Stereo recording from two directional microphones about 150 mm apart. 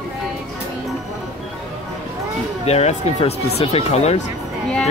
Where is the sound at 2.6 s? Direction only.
45° left (ahead or behind).